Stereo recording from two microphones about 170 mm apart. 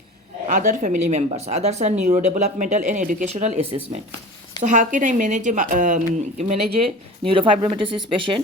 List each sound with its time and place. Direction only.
0.4 s speech: 50° right (ahead or behind)
4.6 s speech: 45° right (ahead or behind); by 8.4 s 30° right (ahead or behind)